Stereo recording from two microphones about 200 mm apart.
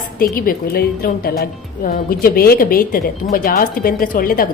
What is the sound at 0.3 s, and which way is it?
A woman's voice, 45° left (ahead or behind).